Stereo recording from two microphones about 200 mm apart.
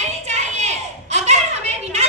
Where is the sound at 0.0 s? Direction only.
35° right (ahead or behind).